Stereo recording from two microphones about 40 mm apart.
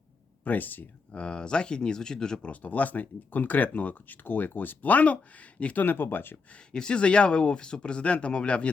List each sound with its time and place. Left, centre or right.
0.4 s speech: left
1.1 s speech: left
2.5 s speech: left
5.7 s speech: left
6.7 s speech: left